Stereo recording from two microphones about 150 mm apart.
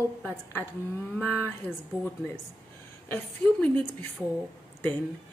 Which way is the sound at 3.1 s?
15° left (ahead or behind).